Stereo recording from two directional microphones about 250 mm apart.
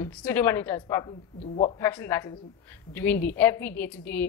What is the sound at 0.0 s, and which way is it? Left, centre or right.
A woman's voice, centre.